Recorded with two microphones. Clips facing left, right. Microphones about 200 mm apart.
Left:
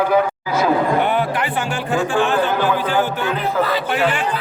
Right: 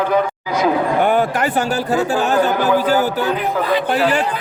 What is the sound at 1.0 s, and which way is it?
A man's voice, 45° right (ahead or behind).